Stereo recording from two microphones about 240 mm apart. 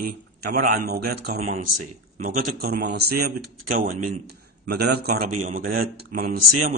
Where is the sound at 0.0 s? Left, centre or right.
Right.